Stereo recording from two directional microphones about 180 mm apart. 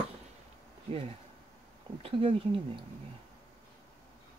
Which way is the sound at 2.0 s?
30° right (ahead or behind).